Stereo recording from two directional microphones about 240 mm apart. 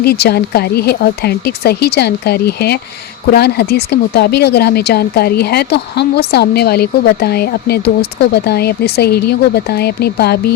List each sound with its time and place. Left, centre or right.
0.0 s speech: left